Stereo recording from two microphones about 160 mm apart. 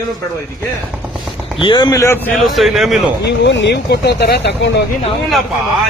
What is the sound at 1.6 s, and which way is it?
Speech, 30° left (ahead or behind).